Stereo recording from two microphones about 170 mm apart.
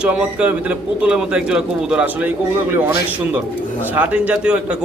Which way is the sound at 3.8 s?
10° right (ahead or behind).